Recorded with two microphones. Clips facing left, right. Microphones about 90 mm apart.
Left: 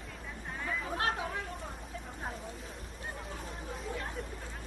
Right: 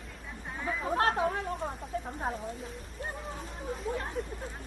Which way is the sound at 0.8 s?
40° right (ahead or behind).